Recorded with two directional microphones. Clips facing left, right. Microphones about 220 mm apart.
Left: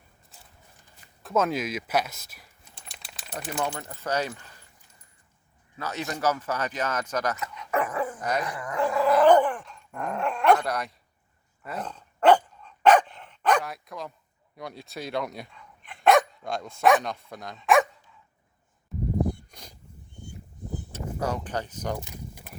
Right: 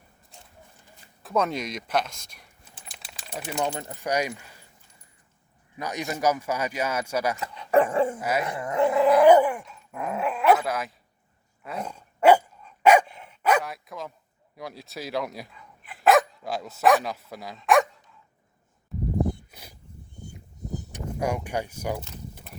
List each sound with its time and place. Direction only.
1.2 s typing: centre (ahead or behind)
3.6 s speech: 15° right (ahead or behind)
5.7 s speech: 15° right (ahead or behind)
7.3 s speech: 30° right (ahead or behind)
8.2 s speech: 5° right (ahead or behind)
8.4 s speech: 25° right (ahead or behind)
9.2 s dog: 10° right (ahead or behind)
14.5 s speech: centre (ahead or behind)
19.5 s a sound: 5° right (ahead or behind)
20.9 s speech: 15° right (ahead or behind)
22.0 s a sound: 10° left (ahead or behind)